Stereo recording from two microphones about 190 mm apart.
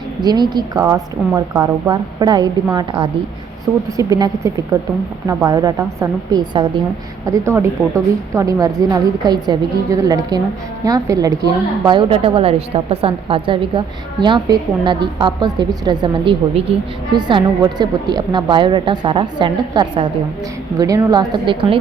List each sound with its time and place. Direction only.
0.2 s a woman's voice: 20° right (ahead or behind)